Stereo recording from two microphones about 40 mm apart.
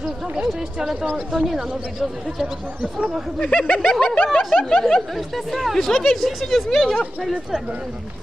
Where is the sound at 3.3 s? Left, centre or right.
Left.